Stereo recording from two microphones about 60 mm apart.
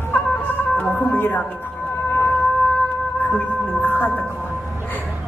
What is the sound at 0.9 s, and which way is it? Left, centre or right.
Music, left.